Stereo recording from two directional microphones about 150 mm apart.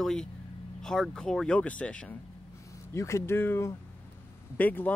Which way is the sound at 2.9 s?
20° left (ahead or behind).